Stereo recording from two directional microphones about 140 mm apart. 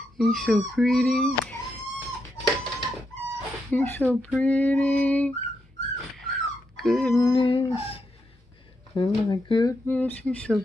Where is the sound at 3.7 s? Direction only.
15° left (ahead or behind).